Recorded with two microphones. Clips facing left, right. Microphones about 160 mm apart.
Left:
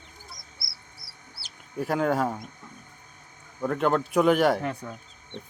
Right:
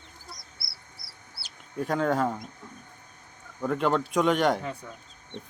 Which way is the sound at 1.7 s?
5° left (ahead or behind).